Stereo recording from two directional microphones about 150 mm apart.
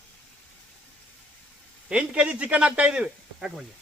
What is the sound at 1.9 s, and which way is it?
Speech, 5° right (ahead or behind).